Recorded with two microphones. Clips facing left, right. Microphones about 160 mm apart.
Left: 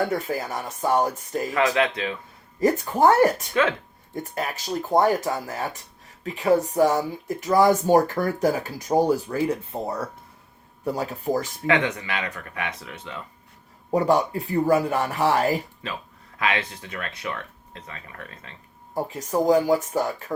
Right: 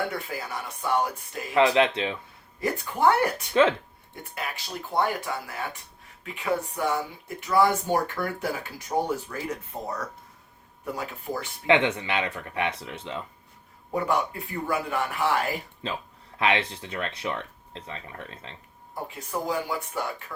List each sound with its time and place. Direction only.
0.1 s speech: 45° left (ahead or behind)
1.5 s speech: 25° right (ahead or behind)
2.6 s speech: 40° left (ahead or behind)
3.5 s speech: 25° right (ahead or behind)
4.1 s speech: 45° left (ahead or behind)
11.6 s speech: 25° right (ahead or behind)
13.9 s speech: 35° left (ahead or behind)
16.4 s speech: 30° right (ahead or behind)
18.9 s speech: 40° left (ahead or behind)